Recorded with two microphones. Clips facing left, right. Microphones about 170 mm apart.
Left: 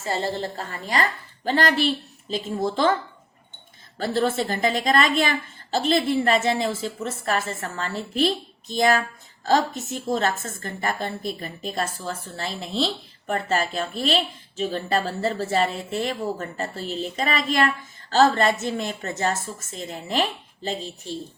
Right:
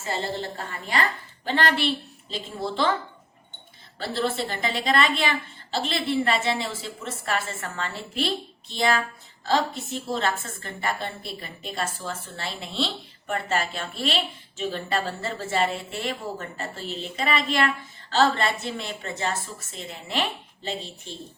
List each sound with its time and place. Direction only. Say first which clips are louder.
0.0 s a woman's voice: left 3 dB; 35° left (ahead or behind)
3.9 s a woman's voice: left 4 dB; 45° left (ahead or behind)